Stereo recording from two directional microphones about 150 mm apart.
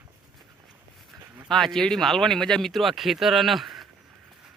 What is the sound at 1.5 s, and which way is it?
Speech, centre (ahead or behind).